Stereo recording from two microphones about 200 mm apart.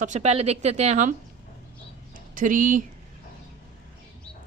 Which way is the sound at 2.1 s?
40° right (ahead or behind).